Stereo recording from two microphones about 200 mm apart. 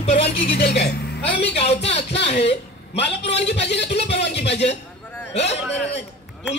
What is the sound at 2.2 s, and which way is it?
Speech, 30° left (ahead or behind).